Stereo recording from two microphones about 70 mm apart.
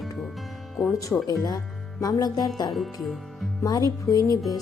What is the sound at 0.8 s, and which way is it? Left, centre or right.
Music, left.